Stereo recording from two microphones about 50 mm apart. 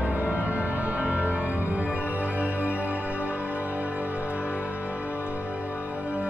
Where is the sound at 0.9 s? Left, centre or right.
Right.